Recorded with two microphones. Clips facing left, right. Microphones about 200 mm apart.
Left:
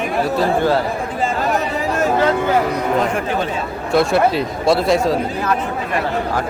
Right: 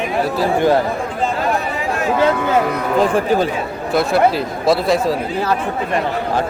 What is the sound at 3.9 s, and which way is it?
Speech, centre (ahead or behind).